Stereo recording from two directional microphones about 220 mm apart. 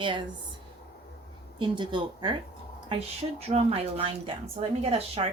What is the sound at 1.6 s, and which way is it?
Speech, 20° right (ahead or behind).